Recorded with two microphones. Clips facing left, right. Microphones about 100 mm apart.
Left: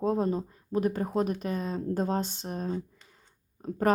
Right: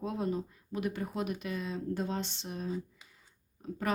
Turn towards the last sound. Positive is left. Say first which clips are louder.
# left 5 dB
turn(degrees=45)  # may be behind; listen again after turning